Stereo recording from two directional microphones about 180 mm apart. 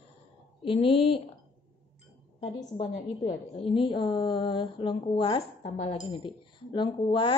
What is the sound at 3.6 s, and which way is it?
Speech, 30° left (ahead or behind).